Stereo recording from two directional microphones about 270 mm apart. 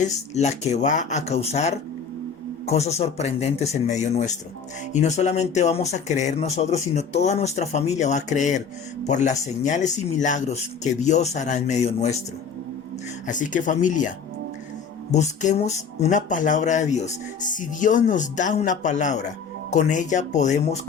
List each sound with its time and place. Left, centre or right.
0.0 s speech: left
13.2 s speech: left
15.1 s speech: left